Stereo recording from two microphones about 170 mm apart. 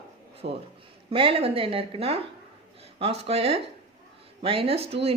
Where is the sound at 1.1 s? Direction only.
35° right (ahead or behind).